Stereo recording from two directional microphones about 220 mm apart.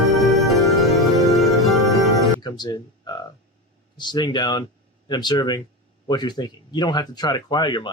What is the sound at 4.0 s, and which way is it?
Speech, 20° left (ahead or behind).